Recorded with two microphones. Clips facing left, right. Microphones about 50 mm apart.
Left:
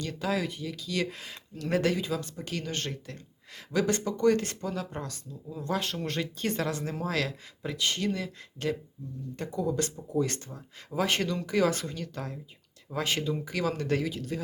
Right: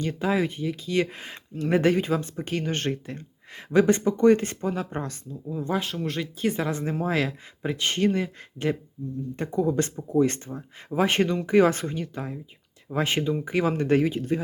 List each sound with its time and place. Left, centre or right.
0.0 s speech: right
5.5 s speech: right
5.8 s speech: centre
6.7 s speech: right
8.7 s speech: right
12.9 s speech: right